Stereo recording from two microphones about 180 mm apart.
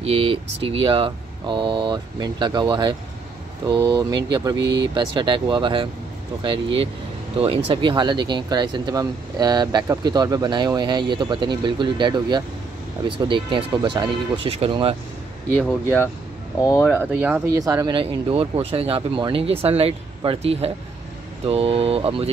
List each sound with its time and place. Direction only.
0.0 s speech: 35° right (ahead or behind)
16.6 s speech: 10° left (ahead or behind)
17.1 s speech: 10° right (ahead or behind); by 22.3 s 35° right (ahead or behind)